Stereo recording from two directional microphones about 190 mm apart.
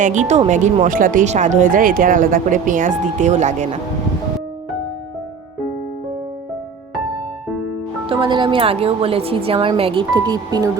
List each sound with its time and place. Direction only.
0.0 s speech: 40° right (ahead or behind)
8.0 s speech: 25° right (ahead or behind)